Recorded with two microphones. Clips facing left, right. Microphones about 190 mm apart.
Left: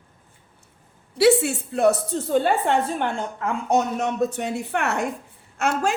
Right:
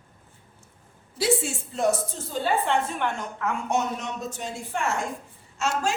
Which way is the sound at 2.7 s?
35° left (ahead or behind).